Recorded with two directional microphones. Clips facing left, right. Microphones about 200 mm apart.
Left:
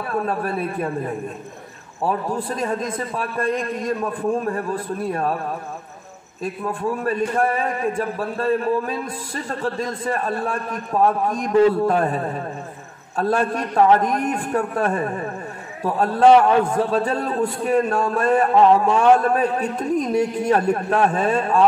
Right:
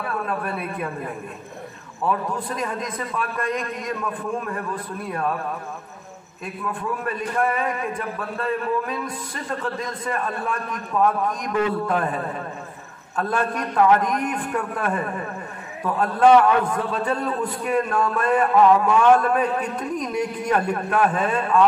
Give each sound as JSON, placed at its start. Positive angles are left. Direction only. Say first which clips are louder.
{"t": 0.1, "sound": "a man's voice", "louder": "left 6 dB", "side_deg": 30}
{"t": 2.0, "sound": "a man's voice", "louder": "left 2 dB", "side_deg": 30}
{"t": 6.4, "sound": "a man's voice", "louder": "left 5 dB", "side_deg": 30}